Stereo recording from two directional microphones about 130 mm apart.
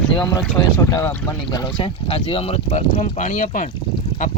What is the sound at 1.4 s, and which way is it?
Speech, 35° left (ahead or behind).